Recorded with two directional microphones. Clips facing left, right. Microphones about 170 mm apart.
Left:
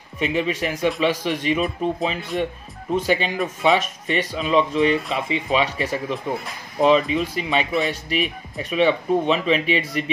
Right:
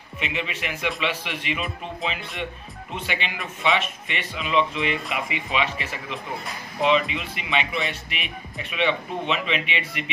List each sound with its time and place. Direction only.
0.2 s speech: 40° left (ahead or behind)